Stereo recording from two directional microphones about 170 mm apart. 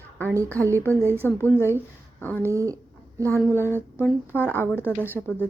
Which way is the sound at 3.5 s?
15° left (ahead or behind).